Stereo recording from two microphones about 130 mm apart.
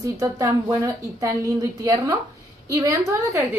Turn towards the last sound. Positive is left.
turn(degrees=-25)  # may be behind; listen again after turning